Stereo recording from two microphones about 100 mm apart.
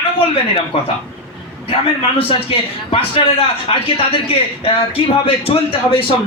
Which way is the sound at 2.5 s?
65° left (ahead or behind).